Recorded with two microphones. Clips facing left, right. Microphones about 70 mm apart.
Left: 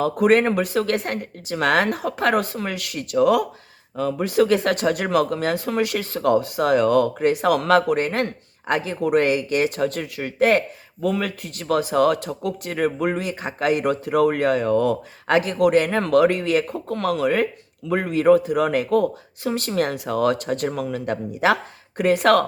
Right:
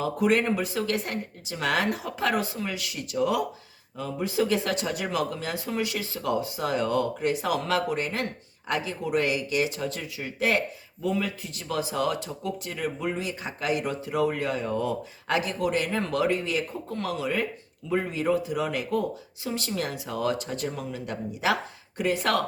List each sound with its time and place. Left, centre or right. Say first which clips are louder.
0.0 s speech: left 7 dB; left